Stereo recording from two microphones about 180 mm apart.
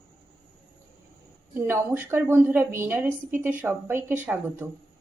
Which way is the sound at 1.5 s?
10° right (ahead or behind).